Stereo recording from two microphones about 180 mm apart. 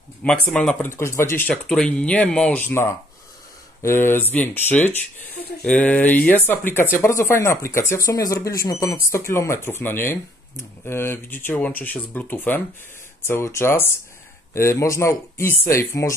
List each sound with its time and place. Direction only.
0.2 s speech: 5° left (ahead or behind)
0.8 s speech: 15° left (ahead or behind)
1.5 s speech: 5° left (ahead or behind)